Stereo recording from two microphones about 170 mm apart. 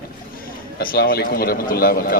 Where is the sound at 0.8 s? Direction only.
60° left (ahead or behind).